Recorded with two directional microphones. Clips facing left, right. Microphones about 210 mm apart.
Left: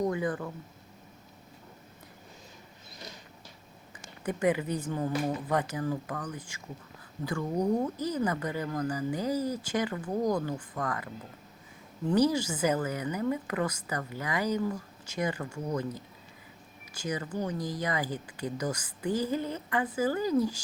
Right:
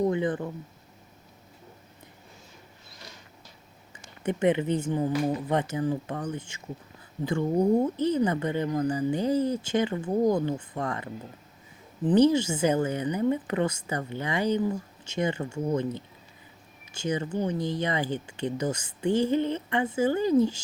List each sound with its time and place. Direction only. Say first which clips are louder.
0.0 s speech: right 4 dB; 25° right (ahead or behind)
4.2 s a woman's voice: right 4 dB; 25° right (ahead or behind)